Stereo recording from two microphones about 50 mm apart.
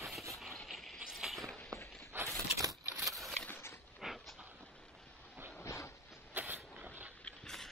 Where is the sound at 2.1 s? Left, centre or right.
Right.